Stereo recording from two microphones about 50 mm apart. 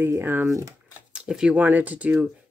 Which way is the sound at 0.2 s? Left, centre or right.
Right.